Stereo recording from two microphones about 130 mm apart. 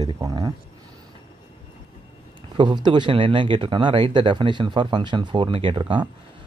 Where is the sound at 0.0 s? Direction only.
30° right (ahead or behind).